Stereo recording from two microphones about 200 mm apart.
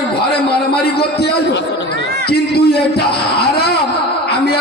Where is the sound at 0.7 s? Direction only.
55° left (ahead or behind).